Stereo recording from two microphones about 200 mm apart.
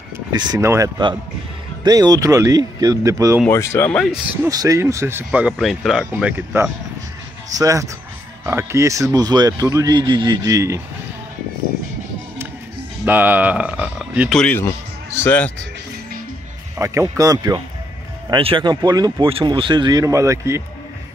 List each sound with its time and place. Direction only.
0.3 s speech: 20° right (ahead or behind)
3.4 s speech: 15° left (ahead or behind)
4.4 s speech: 15° right (ahead or behind)
13.0 s speech: 10° right (ahead or behind)
14.4 s speech: 10° left (ahead or behind)
16.7 s speech: 15° right (ahead or behind)